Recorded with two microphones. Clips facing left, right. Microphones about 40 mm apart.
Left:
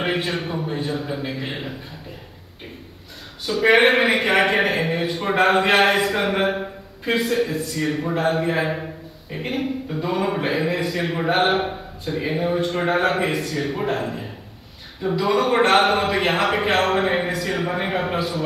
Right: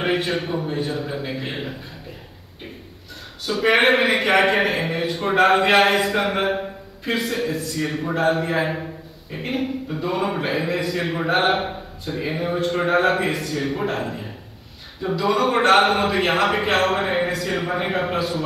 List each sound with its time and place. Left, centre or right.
0.0 s a man's voice: centre
3.4 s a man's voice: centre
6.6 s a sound: centre
7.8 s a man's voice: centre
15.2 s a man's voice: centre